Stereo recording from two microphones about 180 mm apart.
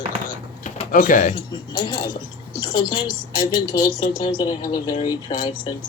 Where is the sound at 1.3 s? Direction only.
25° left (ahead or behind).